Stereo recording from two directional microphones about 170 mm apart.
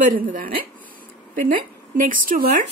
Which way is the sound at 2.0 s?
50° right (ahead or behind).